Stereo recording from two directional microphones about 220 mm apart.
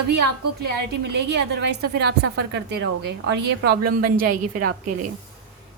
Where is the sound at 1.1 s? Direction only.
50° right (ahead or behind).